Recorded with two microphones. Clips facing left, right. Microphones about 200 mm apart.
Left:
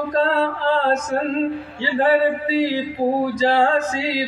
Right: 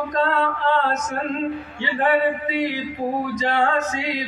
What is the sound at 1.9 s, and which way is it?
Speech, 30° left (ahead or behind).